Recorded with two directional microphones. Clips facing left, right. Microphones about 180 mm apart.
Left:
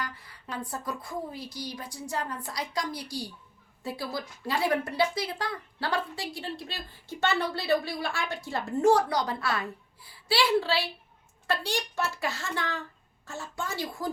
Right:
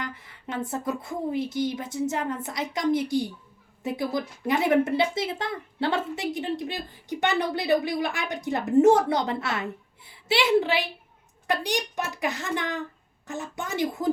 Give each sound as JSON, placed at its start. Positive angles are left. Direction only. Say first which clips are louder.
{"t": 0.0, "sound": "a woman's voice", "louder": "right 3 dB", "side_deg": -20}